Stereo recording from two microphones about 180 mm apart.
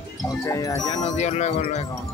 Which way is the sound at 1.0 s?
40° left (ahead or behind).